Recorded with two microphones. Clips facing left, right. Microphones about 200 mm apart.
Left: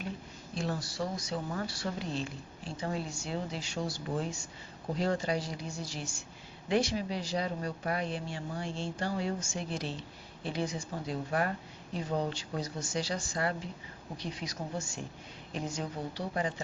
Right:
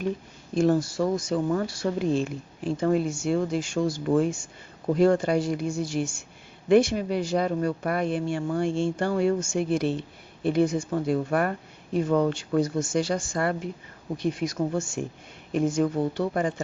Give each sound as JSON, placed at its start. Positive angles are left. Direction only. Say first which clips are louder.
{"t": 0.5, "sound": "speech", "louder": "right 14 dB", "side_deg": -50}